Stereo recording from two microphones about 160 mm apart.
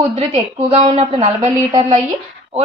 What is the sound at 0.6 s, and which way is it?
A woman's voice, 35° right (ahead or behind).